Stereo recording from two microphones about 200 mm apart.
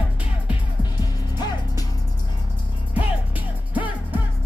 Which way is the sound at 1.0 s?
20° left (ahead or behind).